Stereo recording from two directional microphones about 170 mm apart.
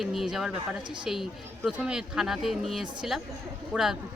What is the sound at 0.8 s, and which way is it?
Speech, 30° right (ahead or behind).